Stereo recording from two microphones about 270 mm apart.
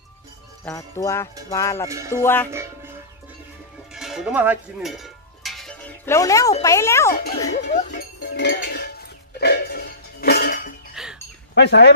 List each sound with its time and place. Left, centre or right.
0.7 s speech: centre
3.9 s cowbell: centre
6.6 s speech: centre
7.2 s speech: left
9.4 s dishes: left
11.0 s a sound: centre
11.5 s speech: left